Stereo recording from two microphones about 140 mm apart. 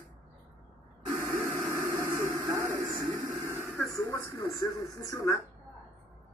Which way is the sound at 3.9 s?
20° left (ahead or behind).